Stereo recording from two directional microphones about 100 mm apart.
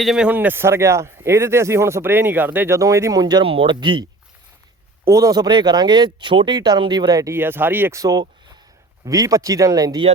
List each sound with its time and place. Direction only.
0.0 s speech: centre (ahead or behind)
0.3 s speech: 20° right (ahead or behind)
2.7 s speech: 30° right (ahead or behind)
3.4 s speech: 60° right (ahead or behind)
5.0 s speech: 35° right (ahead or behind)
7.3 s speech: 20° right (ahead or behind)
7.9 s speech: 35° right (ahead or behind)